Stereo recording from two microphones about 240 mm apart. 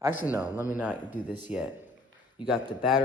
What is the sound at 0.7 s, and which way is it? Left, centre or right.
Speech, centre.